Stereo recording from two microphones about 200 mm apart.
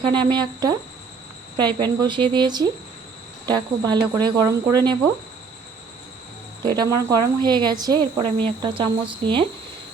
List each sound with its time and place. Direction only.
0.2 s speech: 20° right (ahead or behind)
6.7 s speech: 20° right (ahead or behind)